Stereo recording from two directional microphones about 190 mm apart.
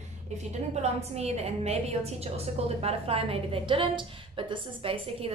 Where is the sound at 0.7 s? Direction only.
35° right (ahead or behind).